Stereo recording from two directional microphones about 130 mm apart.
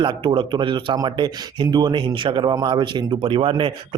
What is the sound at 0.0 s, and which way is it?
Speech, 40° right (ahead or behind).